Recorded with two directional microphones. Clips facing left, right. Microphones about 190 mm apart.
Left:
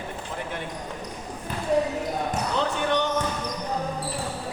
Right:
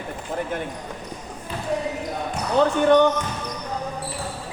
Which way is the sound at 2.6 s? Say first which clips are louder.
Right 11 dB; 50° right (ahead or behind).